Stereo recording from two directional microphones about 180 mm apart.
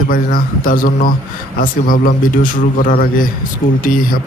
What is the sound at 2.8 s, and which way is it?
Speech, 50° left (ahead or behind).